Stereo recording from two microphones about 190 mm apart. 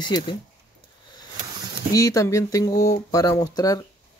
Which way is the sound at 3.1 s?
20° left (ahead or behind).